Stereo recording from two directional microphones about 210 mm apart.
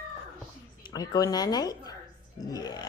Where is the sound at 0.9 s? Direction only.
20° left (ahead or behind).